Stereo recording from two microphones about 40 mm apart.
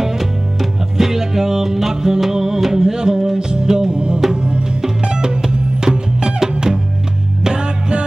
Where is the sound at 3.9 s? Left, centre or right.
Right.